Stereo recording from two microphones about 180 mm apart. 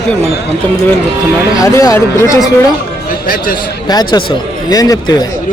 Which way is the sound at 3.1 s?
50° left (ahead or behind).